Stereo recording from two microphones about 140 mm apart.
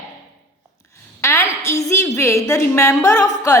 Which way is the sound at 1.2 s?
20° left (ahead or behind).